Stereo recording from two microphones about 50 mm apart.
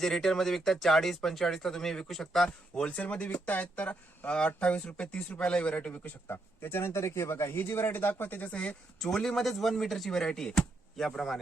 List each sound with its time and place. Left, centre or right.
0.0 s speech: centre
2.9 s speech: left
5.9 s speech: left
6.2 s speech: left
7.5 s speech: left
9.0 s speech: centre